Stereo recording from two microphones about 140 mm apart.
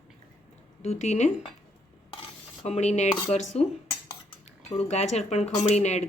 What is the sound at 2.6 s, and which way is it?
Speech, 50° left (ahead or behind).